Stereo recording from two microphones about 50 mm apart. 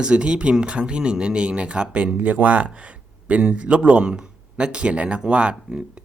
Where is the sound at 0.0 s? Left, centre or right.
Right.